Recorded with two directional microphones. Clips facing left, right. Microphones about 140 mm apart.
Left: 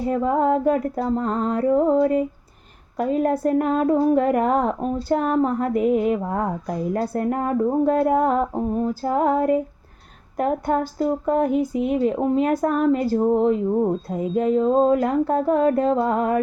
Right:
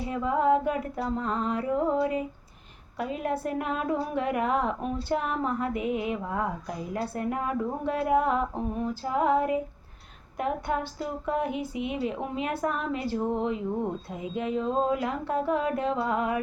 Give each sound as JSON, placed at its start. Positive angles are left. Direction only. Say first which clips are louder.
{"t": 0.0, "sound": "a woman's voice", "louder": "left 6 dB", "side_deg": 40}